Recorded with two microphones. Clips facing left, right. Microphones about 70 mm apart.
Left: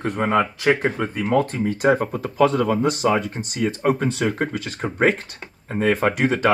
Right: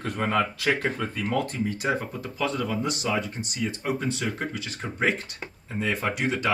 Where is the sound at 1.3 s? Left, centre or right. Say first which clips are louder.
Left 8 dB; left.